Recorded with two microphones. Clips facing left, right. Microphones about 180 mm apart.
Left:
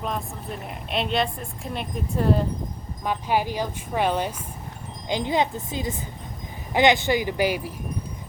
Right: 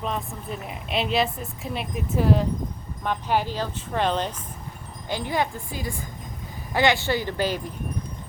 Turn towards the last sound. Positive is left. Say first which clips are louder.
# left 2 dB
turn(degrees=10)  # may be behind; listen again after turning